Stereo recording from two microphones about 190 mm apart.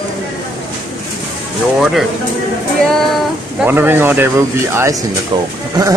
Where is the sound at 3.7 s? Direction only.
10° right (ahead or behind).